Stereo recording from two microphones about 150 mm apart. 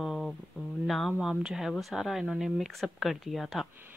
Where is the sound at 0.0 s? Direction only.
Centre (ahead or behind).